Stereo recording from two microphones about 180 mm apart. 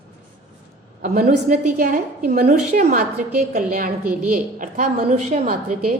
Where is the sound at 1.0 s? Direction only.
50° right (ahead or behind).